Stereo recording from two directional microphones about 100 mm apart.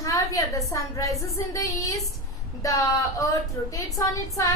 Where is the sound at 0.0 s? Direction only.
35° left (ahead or behind).